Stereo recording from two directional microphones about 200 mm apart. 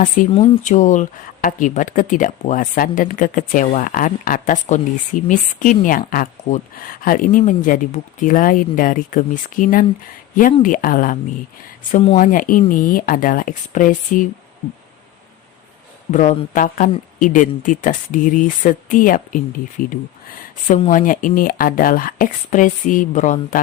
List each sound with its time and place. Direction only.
0.3 s speech: 25° left (ahead or behind)
16.1 s speech: 40° left (ahead or behind)